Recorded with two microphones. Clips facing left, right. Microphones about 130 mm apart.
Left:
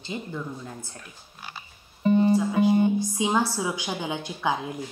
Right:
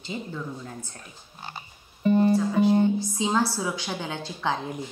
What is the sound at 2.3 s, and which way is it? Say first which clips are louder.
A woman's voice: even; 15° left (ahead or behind).